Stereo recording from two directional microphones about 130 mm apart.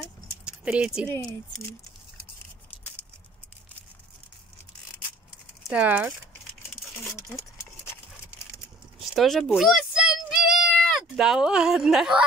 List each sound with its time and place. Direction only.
0.5 s speech: 5° right (ahead or behind)
5.6 s speech: 10° right (ahead or behind)
7.2 s a sound: 20° left (ahead or behind)
9.1 s speech: centre (ahead or behind)
9.6 s child singing: 5° right (ahead or behind)